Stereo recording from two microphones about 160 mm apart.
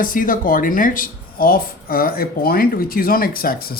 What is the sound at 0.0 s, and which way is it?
Speech, 60° left (ahead or behind).